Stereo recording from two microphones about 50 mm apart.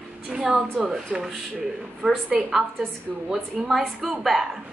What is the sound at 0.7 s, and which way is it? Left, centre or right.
Speech, centre.